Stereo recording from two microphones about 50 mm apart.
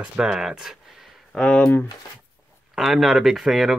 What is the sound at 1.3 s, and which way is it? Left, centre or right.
Speech, centre.